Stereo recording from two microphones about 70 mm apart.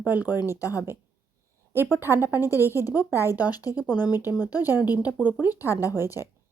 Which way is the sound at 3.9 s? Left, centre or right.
Left.